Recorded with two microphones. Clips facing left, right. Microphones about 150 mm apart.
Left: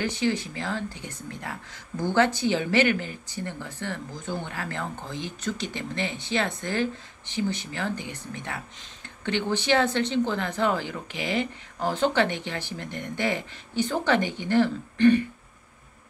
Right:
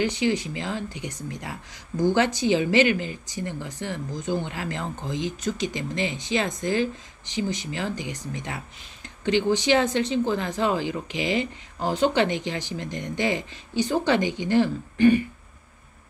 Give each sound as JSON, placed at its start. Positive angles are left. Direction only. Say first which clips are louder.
{"t": 0.0, "sound": "speech", "louder": "right 3 dB", "side_deg": -15}
{"t": 11.1, "sound": "speech", "louder": "right 4 dB", "side_deg": 50}
{"t": 11.3, "sound": "speech", "louder": "right 1 dB", "side_deg": -15}